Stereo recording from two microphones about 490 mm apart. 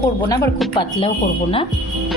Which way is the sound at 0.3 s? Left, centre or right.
Centre.